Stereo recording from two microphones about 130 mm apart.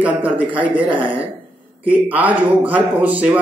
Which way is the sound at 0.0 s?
10° right (ahead or behind).